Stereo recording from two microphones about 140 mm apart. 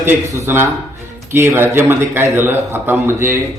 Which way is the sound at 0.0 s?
15° right (ahead or behind).